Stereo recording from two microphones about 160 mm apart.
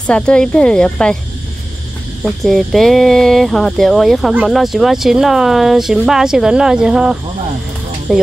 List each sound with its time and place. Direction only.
0.0 s speech: 5° left (ahead or behind)
2.2 s speech: centre (ahead or behind)